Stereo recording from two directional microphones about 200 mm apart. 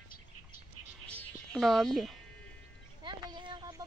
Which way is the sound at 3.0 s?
25° right (ahead or behind).